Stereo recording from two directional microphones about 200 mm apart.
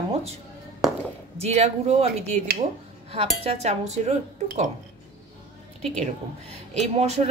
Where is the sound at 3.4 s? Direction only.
35° right (ahead or behind).